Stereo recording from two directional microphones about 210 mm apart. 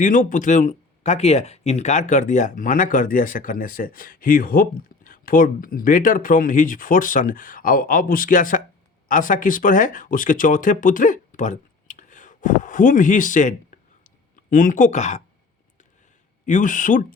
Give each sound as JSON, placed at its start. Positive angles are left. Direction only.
{"t": 0.0, "sound": "speech", "side_deg": 40}
{"t": 14.5, "sound": "speech", "side_deg": 40}
{"t": 16.5, "sound": "speech", "side_deg": 35}